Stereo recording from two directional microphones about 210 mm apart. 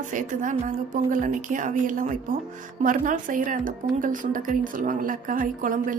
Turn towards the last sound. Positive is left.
turn(degrees=-40)  # may be behind; listen again after turning